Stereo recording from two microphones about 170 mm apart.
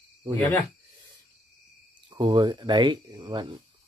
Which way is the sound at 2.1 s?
25° right (ahead or behind).